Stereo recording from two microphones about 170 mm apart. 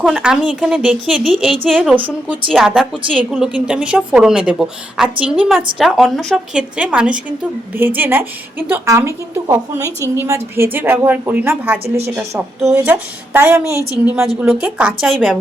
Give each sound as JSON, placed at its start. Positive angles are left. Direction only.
{"t": 0.0, "sound": "a woman's voice", "side_deg": -5}